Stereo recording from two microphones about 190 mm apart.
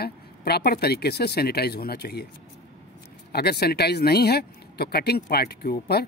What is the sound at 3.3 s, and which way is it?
Speech, 55° left (ahead or behind).